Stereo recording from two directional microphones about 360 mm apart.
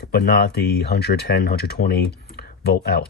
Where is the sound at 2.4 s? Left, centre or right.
Left.